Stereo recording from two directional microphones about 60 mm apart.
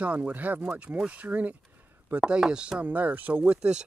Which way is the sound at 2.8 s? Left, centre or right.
Right.